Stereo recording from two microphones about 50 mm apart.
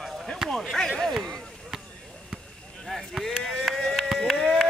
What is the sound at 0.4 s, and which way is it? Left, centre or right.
Speech, centre.